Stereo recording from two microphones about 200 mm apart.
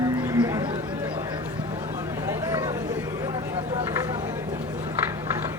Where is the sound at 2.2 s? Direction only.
15° right (ahead or behind).